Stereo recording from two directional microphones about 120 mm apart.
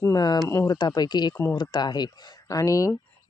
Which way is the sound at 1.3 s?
20° left (ahead or behind).